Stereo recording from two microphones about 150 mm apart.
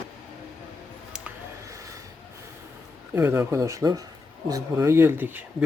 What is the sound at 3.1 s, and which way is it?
Speech, 15° right (ahead or behind).